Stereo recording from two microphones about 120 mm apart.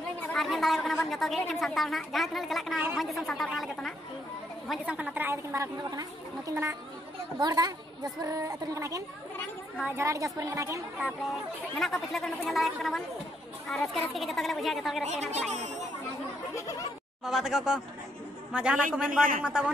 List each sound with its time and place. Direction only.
0.3 s a woman's voice: centre (ahead or behind)
4.6 s a woman's voice: 10° right (ahead or behind)
7.3 s a woman's voice: 35° right (ahead or behind)
9.8 s a man's voice: 10° right (ahead or behind)
10.0 s a woman's voice: 25° right (ahead or behind)
11.0 s a woman's voice: 5° right (ahead or behind)
15.0 s speech: 70° right (ahead or behind)
16.5 s a sound: 25° left (ahead or behind)
17.2 s a woman's voice: 5° right (ahead or behind)